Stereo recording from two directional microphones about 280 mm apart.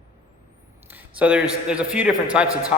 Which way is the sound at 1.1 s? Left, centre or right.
Centre.